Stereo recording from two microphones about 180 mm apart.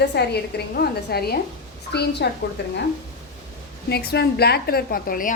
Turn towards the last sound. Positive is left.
turn(degrees=55)  # may be behind; listen again after turning